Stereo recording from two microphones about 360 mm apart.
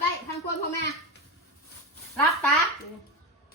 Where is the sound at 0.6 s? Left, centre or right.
Left.